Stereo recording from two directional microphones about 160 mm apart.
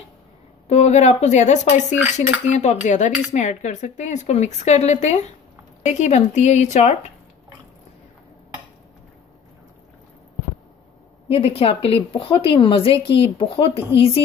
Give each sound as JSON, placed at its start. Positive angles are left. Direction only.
{"t": 0.7, "sound": "speech", "side_deg": 45}
{"t": 11.2, "sound": "a woman's voice", "side_deg": 40}